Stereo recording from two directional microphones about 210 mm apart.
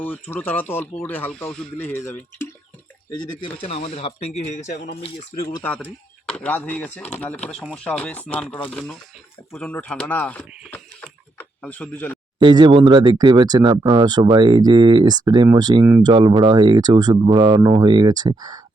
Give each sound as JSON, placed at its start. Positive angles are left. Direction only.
{"t": 0.0, "sound": "speech", "side_deg": 10}
{"t": 3.2, "sound": "speech", "side_deg": 25}
{"t": 5.6, "sound": "speech", "side_deg": 5}
{"t": 9.5, "sound": "a sound", "side_deg": 5}
{"t": 12.4, "sound": "speech", "side_deg": -20}